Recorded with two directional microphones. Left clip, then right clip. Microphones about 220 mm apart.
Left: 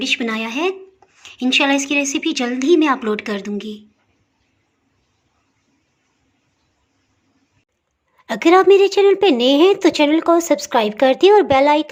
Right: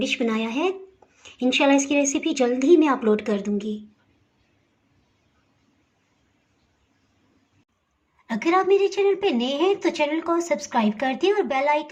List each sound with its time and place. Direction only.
0.0 s a woman's voice: centre (ahead or behind)
8.3 s a woman's voice: 45° left (ahead or behind)